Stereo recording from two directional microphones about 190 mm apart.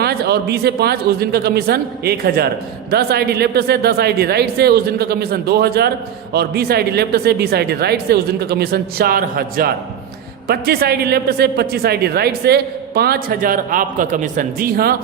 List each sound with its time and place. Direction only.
0.0 s a man's voice: 55° right (ahead or behind)